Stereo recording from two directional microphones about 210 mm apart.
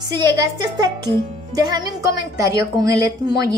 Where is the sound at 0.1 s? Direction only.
20° right (ahead or behind).